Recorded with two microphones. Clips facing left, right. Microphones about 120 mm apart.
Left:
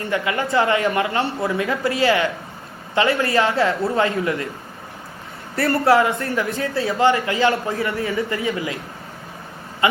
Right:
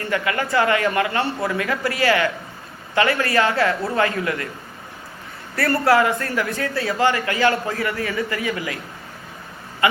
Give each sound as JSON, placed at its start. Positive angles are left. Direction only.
{"t": 0.0, "sound": "a man's voice", "side_deg": 20}
{"t": 5.5, "sound": "a man's voice", "side_deg": 25}